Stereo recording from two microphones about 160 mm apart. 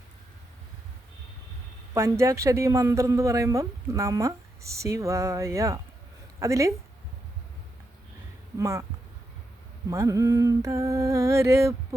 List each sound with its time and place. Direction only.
1.9 s a woman's voice: 20° right (ahead or behind)
8.5 s a woman's voice: 20° right (ahead or behind)
9.9 s a woman's voice: 20° right (ahead or behind)